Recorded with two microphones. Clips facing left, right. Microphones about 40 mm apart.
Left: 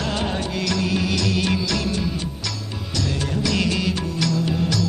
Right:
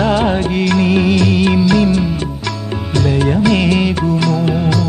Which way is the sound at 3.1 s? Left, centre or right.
Right.